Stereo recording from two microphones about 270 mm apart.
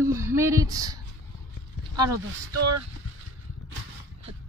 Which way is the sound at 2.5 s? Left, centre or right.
Right.